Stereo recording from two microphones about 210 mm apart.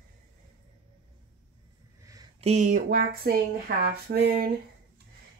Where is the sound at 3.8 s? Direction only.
50° right (ahead or behind).